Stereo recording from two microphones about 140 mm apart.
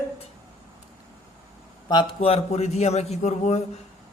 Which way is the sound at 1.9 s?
35° left (ahead or behind).